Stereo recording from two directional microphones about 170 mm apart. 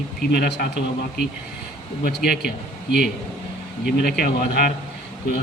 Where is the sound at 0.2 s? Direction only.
70° left (ahead or behind).